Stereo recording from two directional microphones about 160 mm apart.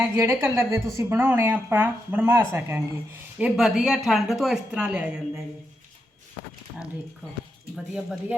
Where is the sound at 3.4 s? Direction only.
5° right (ahead or behind).